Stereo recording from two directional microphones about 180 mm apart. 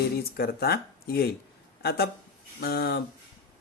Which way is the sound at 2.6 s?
60° left (ahead or behind).